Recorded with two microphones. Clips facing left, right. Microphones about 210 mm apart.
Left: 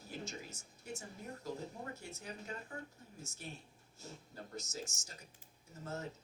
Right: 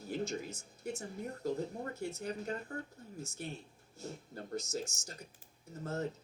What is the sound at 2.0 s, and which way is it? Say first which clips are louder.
Speech: right 9 dB; 60° right (ahead or behind).